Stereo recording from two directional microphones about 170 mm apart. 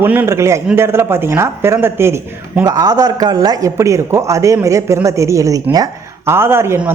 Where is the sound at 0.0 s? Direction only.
10° right (ahead or behind).